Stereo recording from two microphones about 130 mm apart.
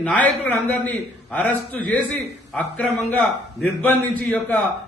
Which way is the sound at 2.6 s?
5° left (ahead or behind).